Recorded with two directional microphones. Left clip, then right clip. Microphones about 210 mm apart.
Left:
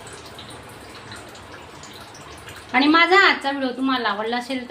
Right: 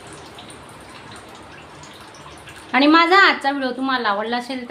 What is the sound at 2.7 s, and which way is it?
A woman's voice, 25° right (ahead or behind).